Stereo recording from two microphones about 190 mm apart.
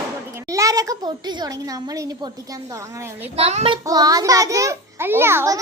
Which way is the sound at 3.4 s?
30° right (ahead or behind).